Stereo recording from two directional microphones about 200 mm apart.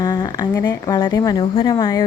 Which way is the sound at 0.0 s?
20° left (ahead or behind).